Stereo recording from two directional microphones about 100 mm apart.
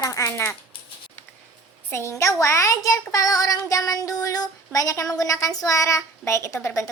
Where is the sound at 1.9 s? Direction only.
25° left (ahead or behind).